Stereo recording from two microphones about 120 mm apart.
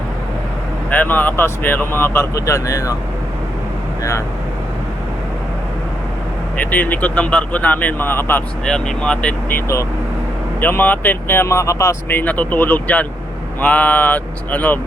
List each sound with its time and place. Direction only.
0.9 s speech: 15° left (ahead or behind)
6.6 s speech: 15° left (ahead or behind)
8.6 s speech: 5° left (ahead or behind)